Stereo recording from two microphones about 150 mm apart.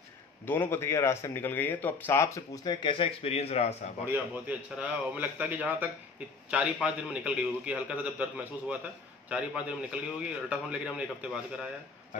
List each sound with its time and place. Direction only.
0.5 s speech: 15° left (ahead or behind); by 3.9 s 45° left (ahead or behind)
4.1 s a man's voice: 10° right (ahead or behind)